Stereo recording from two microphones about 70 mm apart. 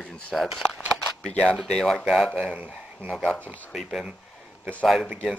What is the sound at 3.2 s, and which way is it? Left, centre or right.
Speech, centre.